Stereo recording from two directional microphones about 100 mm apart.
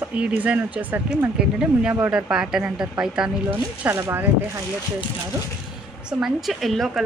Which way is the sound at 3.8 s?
20° right (ahead or behind).